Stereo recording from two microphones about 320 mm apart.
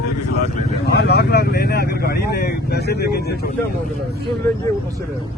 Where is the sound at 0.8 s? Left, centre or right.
Left.